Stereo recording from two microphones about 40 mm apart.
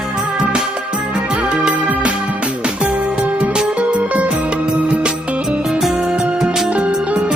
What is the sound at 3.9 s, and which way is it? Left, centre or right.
Music, right.